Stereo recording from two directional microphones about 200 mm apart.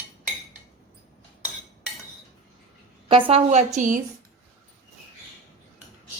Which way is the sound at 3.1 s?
25° right (ahead or behind).